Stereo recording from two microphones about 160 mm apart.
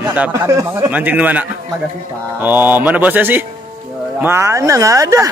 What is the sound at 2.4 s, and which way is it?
A man's voice, 10° right (ahead or behind).